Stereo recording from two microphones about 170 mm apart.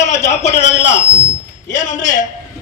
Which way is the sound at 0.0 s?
45° left (ahead or behind).